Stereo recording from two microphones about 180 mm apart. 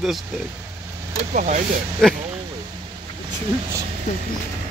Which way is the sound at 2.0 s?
5° left (ahead or behind).